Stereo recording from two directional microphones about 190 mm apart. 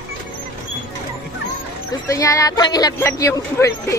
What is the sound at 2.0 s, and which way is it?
Speech, 15° left (ahead or behind).